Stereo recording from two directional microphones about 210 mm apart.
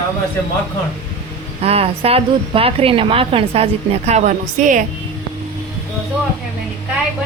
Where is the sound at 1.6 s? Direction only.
30° right (ahead or behind).